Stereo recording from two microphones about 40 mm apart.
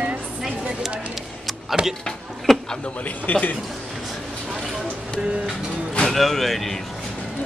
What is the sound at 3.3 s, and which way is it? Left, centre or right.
Speech, left.